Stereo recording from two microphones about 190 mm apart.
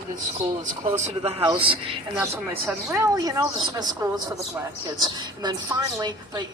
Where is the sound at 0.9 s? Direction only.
35° right (ahead or behind).